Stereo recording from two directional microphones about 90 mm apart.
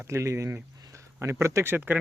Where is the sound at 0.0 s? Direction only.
30° right (ahead or behind).